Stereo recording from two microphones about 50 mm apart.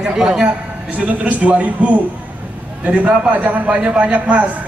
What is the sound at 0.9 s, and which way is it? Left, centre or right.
A man's voice, right.